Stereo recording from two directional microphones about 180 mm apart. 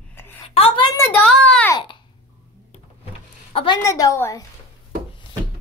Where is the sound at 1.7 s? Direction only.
25° left (ahead or behind).